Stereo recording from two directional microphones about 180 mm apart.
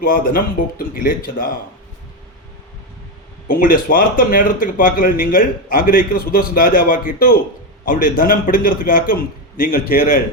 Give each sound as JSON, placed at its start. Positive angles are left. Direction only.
{"t": 0.0, "sound": "speech", "side_deg": 50}
{"t": 3.4, "sound": "a man's voice", "side_deg": 50}